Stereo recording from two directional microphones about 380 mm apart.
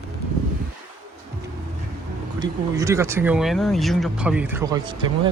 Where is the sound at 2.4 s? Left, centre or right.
Centre.